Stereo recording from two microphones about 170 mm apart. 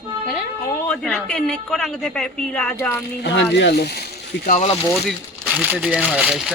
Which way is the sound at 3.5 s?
75° left (ahead or behind).